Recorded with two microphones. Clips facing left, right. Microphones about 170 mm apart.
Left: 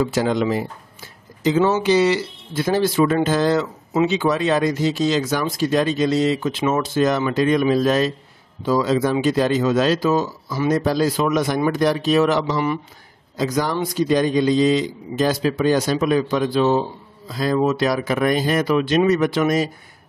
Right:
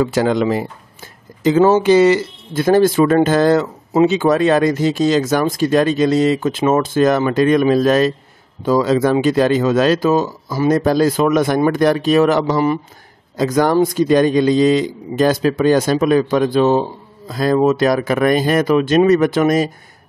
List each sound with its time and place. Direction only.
0.0 s speech: 65° right (ahead or behind)